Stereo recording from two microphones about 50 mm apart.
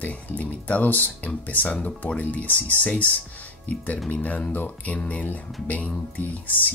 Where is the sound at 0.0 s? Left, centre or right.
Left.